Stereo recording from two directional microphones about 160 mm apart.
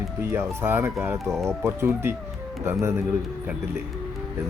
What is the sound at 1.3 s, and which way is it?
Speech, 5° left (ahead or behind).